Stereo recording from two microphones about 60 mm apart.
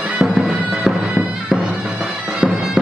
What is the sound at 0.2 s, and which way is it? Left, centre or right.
Bagpipes, centre.